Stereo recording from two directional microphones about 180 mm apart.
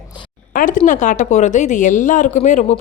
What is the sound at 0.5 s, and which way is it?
A woman's voice, 50° left (ahead or behind).